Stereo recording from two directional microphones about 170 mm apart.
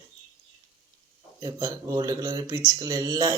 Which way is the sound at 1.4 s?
20° right (ahead or behind).